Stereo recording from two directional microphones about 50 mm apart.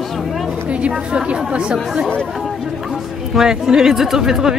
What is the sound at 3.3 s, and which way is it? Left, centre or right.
Speech, centre.